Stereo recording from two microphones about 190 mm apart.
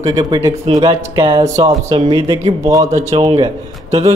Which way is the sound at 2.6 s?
15° right (ahead or behind).